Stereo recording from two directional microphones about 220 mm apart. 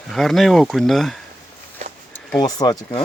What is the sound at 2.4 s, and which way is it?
Speech, 20° left (ahead or behind).